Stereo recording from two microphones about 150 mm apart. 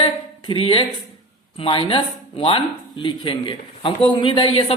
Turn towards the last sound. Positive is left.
turn(degrees=35)  # may be behind; listen again after turning